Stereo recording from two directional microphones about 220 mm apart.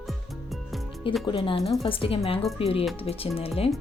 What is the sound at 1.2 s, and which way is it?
A woman's voice, 25° left (ahead or behind).